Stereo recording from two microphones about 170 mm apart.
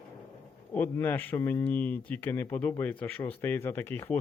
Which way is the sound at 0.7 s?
10° left (ahead or behind).